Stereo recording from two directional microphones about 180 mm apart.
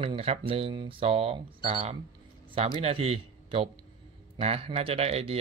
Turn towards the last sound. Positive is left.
turn(degrees=-35)  # may be behind; listen again after turning